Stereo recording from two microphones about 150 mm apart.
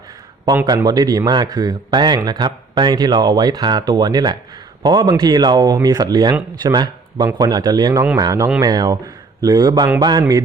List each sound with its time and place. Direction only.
0.4 s a man's voice: 25° right (ahead or behind)